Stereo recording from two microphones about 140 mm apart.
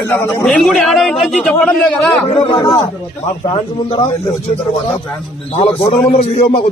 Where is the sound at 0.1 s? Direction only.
15° left (ahead or behind).